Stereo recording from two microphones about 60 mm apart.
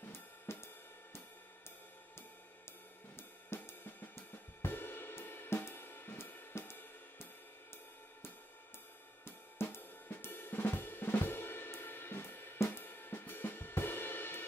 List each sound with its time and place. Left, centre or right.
0.0 s cymbal: left
3.2 s cymbal: left
9.2 s cymbal: left